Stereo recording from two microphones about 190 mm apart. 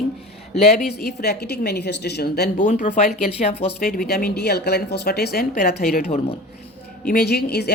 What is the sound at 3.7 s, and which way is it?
Speech, 50° left (ahead or behind).